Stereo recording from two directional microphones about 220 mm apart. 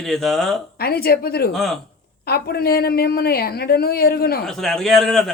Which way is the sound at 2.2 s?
45° left (ahead or behind).